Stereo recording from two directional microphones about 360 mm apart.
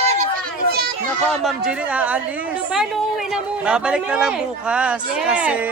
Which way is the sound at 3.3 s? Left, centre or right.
Centre.